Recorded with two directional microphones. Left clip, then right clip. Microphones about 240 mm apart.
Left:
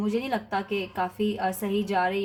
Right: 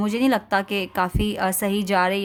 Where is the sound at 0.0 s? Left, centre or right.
Right.